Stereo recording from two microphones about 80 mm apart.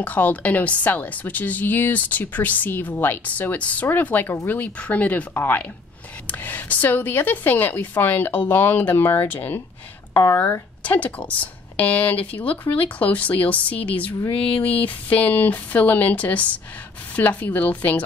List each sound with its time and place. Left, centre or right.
0.0 s speech: centre
10.2 s speech: left
10.9 s speech: centre